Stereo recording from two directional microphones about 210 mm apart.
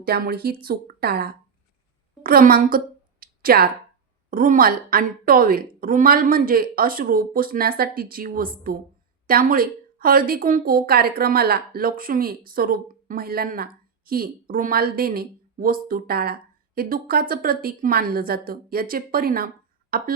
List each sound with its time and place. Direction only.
0.0 s a woman's voice: 45° right (ahead or behind)